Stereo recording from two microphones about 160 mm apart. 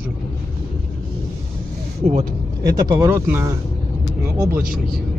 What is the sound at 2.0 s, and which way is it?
Speech, 45° right (ahead or behind).